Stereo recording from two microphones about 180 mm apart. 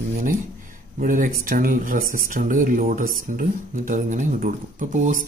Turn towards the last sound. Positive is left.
turn(degrees=-45)  # may be behind; listen again after turning